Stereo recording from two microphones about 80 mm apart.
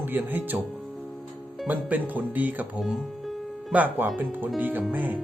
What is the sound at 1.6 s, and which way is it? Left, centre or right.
Speech, right.